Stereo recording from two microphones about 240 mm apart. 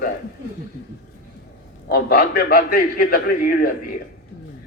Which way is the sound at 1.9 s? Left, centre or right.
Left.